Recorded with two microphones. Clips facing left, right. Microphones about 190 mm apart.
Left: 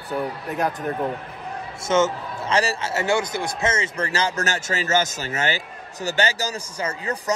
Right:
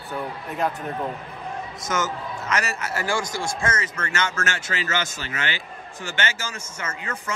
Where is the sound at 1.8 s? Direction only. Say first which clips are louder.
Left 7 dB; 25° left (ahead or behind).